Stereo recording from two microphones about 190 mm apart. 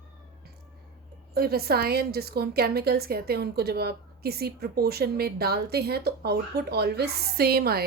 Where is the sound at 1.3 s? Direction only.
55° right (ahead or behind).